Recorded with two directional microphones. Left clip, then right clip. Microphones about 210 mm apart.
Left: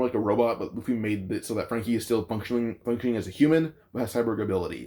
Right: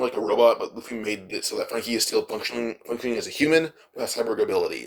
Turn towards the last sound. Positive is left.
turn(degrees=-35)  # may be behind; listen again after turning